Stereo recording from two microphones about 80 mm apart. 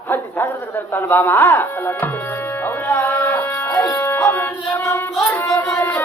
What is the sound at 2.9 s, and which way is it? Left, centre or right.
Music, left.